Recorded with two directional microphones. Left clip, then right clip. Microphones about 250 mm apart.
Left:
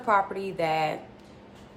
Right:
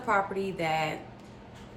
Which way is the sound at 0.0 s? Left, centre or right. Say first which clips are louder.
Left 3 dB; centre.